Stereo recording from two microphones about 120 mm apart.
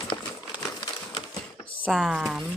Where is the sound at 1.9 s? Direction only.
5° right (ahead or behind).